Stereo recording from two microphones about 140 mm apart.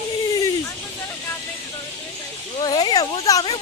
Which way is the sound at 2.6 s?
30° left (ahead or behind).